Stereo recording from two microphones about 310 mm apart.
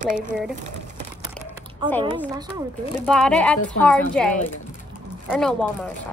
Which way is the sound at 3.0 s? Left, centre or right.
Centre.